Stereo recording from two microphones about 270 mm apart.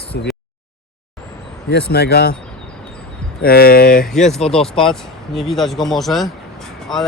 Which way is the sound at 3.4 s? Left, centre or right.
Left.